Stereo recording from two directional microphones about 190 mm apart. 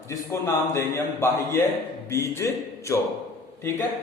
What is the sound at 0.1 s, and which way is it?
A man's voice, 15° left (ahead or behind).